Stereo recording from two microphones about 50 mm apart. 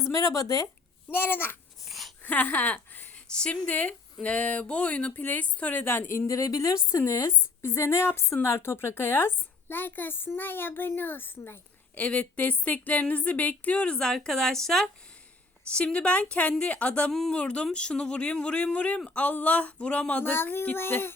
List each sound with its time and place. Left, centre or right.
0.0 s a sound: left
1.1 s a woman's voice: left
1.9 s a sound: centre
2.2 s speech: left
3.2 s speech: centre
5.1 s speech: left
5.8 s a woman's voice: left
11.9 s speech: left
14.0 s a woman's voice: centre
15.7 s speech: left
17.1 s a woman's voice: centre
17.3 s speech: left
20.3 s a woman's voice: left